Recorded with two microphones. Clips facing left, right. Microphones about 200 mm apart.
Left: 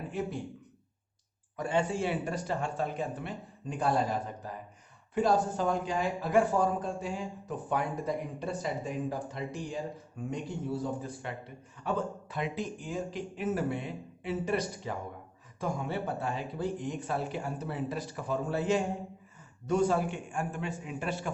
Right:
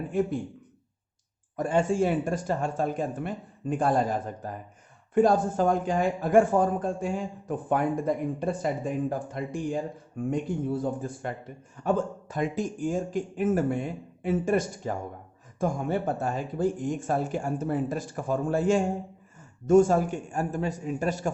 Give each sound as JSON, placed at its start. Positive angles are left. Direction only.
{"t": 0.1, "sound": "speech", "side_deg": -50}
{"t": 1.5, "sound": "a man's voice", "side_deg": -45}